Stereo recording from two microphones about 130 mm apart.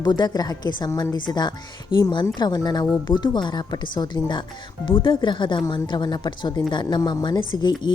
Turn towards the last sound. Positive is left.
turn(degrees=35)  # may be behind; listen again after turning